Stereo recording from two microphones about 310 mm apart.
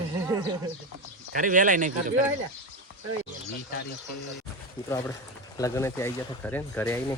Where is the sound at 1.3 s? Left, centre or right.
Right.